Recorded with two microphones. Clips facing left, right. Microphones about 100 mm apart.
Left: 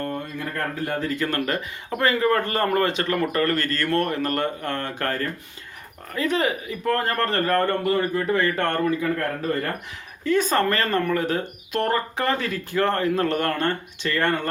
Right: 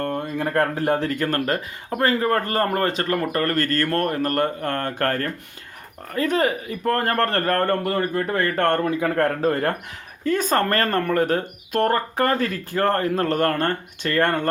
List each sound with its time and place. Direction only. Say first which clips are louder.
0.0 s speech: right 4 dB; 60° right (ahead or behind)
1.2 s speech: right 2 dB; 45° right (ahead or behind); by 9.7 s 75° right (ahead or behind)
10.2 s speech: even; 45° right (ahead or behind)